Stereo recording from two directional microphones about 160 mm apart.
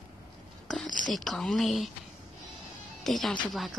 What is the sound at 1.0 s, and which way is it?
Speech, centre (ahead or behind).